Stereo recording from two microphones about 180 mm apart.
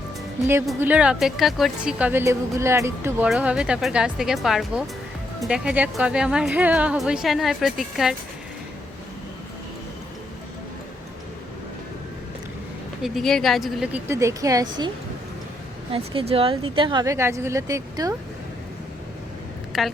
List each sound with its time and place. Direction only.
0.8 s a woman's voice: 10° right (ahead or behind)
13.0 s a woman's voice: centre (ahead or behind); by 14.8 s 20° right (ahead or behind)
15.9 s a woman's voice: 30° right (ahead or behind)
19.7 s a woman's voice: 5° right (ahead or behind)